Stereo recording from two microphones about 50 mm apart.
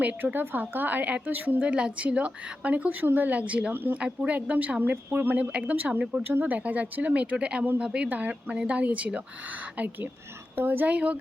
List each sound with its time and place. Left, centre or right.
0.0 s speech: right
0.3 s a woman's voice: right
1.6 s speech: right
3.0 s a woman's voice: right
5.4 s a woman's voice: right